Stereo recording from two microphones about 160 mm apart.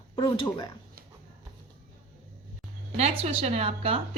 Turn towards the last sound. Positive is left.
turn(degrees=-35)  # may be behind; listen again after turning